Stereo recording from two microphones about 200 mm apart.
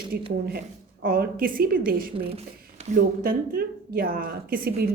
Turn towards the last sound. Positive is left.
turn(degrees=-50)  # may be behind; listen again after turning